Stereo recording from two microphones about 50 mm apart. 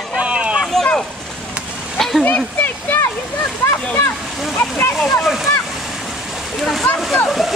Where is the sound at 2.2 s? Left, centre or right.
Left.